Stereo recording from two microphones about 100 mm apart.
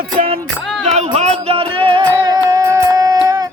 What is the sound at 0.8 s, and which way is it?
Music, 90° right.